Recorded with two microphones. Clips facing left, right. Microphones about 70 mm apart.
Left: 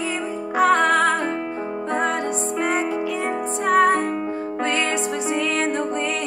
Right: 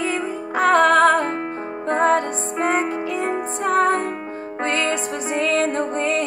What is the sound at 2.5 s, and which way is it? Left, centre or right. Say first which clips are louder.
Music: right 3 dB; right.